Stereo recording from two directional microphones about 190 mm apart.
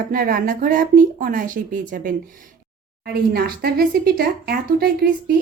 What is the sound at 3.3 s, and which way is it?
Speech, 55° right (ahead or behind).